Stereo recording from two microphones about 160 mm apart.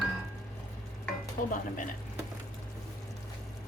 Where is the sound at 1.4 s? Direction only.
55° left (ahead or behind).